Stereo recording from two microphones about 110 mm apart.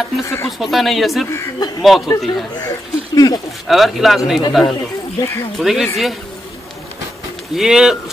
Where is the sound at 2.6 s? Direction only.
35° left (ahead or behind).